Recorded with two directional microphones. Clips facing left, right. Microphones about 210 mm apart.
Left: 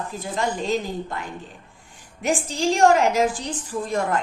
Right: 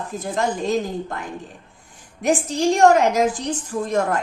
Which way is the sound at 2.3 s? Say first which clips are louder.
Right 4 dB; 40° right (ahead or behind).